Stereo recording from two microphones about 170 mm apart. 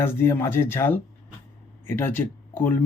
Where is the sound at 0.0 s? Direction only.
15° left (ahead or behind).